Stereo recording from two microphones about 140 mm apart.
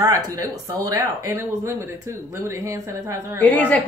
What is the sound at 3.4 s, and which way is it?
Speech, 10° left (ahead or behind).